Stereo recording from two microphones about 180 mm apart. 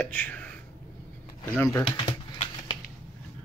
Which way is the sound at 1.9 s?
30° left (ahead or behind).